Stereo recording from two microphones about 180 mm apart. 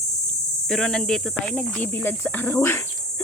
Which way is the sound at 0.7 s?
5° left (ahead or behind).